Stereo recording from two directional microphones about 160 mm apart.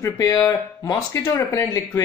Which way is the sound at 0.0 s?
20° left (ahead or behind).